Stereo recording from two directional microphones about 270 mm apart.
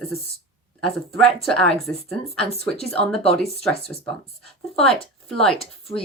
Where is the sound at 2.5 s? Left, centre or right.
Left.